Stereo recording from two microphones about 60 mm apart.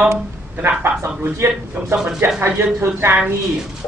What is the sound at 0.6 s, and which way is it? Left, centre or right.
A man's voice, right.